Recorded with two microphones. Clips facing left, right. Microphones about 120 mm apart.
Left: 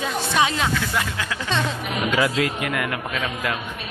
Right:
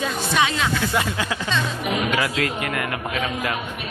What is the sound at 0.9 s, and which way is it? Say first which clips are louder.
Speech: right 3 dB; 15° right (ahead or behind).